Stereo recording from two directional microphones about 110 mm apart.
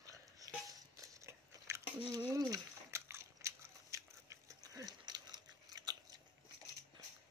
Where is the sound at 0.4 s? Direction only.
35° right (ahead or behind).